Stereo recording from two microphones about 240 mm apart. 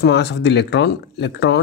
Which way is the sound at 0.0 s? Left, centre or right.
Left.